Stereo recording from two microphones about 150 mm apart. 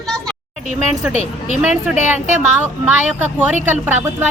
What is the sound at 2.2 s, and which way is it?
Speech, 55° right (ahead or behind).